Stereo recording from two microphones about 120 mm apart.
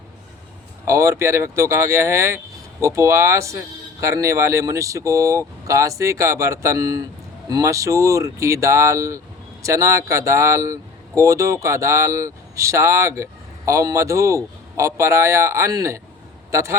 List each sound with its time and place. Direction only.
0.9 s speech: 25° right (ahead or behind)